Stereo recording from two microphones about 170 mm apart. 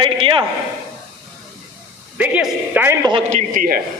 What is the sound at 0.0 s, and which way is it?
Speech, 30° right (ahead or behind).